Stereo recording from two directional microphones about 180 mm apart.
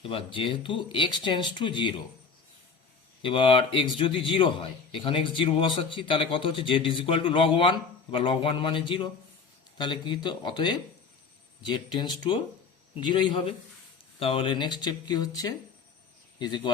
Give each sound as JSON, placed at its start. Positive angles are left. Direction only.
{"t": 0.0, "sound": "a man's voice", "side_deg": 30}
{"t": 3.2, "sound": "a man's voice", "side_deg": 30}